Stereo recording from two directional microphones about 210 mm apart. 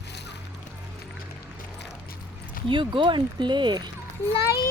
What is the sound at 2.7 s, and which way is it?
Speech, 25° right (ahead or behind).